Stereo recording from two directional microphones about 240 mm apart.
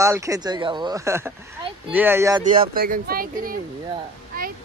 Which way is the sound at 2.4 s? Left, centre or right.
Right.